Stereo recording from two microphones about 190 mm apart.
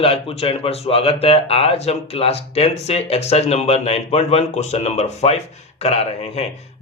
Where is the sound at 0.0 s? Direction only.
30° left (ahead or behind).